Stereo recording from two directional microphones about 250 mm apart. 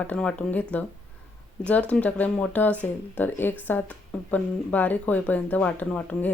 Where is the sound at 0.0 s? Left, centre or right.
Centre.